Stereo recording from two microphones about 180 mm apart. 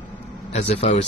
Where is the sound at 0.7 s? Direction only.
35° left (ahead or behind).